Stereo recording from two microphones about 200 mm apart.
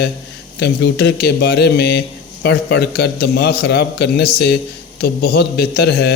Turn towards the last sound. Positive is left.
turn(degrees=55)  # may be behind; listen again after turning